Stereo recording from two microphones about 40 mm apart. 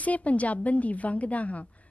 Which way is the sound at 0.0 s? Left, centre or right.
Left.